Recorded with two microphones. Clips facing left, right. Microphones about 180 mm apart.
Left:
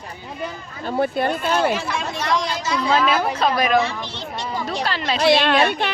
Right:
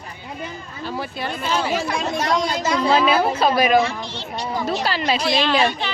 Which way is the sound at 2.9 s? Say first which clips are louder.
Right 2 dB; 5° right (ahead or behind).